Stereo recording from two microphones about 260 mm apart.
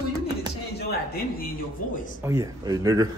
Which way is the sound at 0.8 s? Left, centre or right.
Left.